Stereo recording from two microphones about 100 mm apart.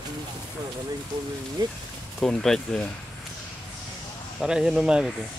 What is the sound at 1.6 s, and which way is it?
Speech, 40° right (ahead or behind).